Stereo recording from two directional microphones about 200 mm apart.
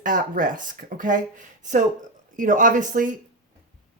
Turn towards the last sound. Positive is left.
turn(degrees=-40)  # may be behind; listen again after turning